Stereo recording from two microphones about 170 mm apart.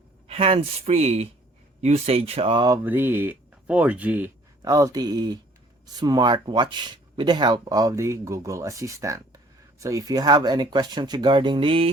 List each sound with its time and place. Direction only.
0.3 s speech: 35° right (ahead or behind)
2.8 s speech: 10° right (ahead or behind)
4.7 s speech: 20° right (ahead or behind)